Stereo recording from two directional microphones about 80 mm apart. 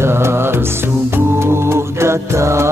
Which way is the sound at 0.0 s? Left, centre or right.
Right.